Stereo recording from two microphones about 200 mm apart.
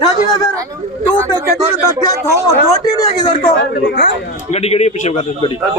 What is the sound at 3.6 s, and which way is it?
Speech, 55° left (ahead or behind).